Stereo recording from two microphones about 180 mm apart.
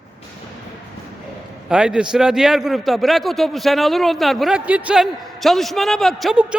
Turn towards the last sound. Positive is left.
turn(degrees=-5)  # may be behind; listen again after turning